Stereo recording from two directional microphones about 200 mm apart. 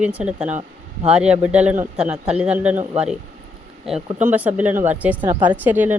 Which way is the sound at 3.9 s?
Centre (ahead or behind).